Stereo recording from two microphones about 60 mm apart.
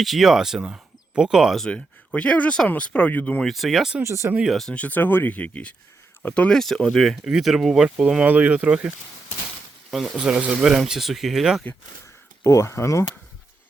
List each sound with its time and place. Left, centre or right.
0.0 s speech: centre
1.7 s speech: left
3.4 s speech: centre
4.0 s speech: right
4.4 s speech: centre
4.7 s speech: left
6.5 s speech: centre
7.8 s speech: centre
9.9 s speech: centre
10.2 s speech: centre
12.5 s speech: left